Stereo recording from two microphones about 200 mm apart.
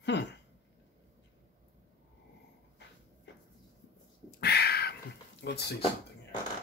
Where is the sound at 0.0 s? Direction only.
60° left (ahead or behind).